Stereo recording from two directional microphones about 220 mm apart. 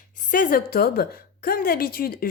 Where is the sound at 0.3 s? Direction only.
40° left (ahead or behind).